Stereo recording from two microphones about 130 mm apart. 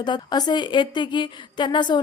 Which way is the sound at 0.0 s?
35° left (ahead or behind).